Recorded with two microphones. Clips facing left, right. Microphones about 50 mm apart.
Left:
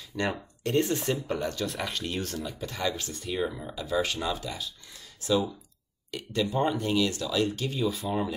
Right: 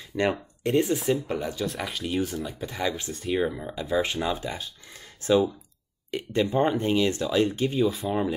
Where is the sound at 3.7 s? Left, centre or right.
Right.